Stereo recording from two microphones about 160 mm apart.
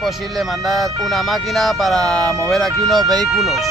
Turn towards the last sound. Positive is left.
turn(degrees=0)  # may be behind; listen again after turning